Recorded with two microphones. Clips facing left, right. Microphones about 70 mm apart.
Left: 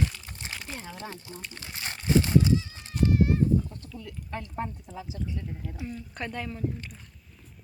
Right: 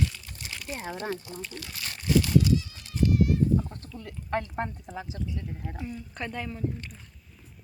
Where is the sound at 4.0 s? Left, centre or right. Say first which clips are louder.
Right 7 dB; right.